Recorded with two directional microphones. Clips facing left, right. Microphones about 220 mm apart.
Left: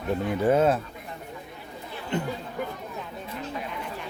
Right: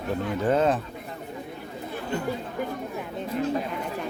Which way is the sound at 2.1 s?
20° left (ahead or behind).